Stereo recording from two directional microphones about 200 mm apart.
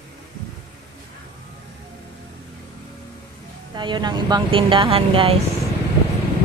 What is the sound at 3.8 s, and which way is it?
Speech, 20° right (ahead or behind).